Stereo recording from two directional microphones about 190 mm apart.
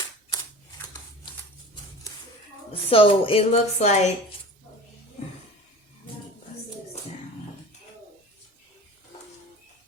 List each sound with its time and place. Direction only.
2.9 s a woman's voice: 30° left (ahead or behind)